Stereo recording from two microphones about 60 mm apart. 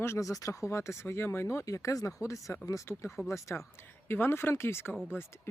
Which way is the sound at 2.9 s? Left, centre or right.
Left.